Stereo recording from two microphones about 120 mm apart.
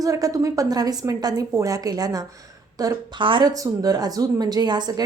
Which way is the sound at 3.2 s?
45° right (ahead or behind).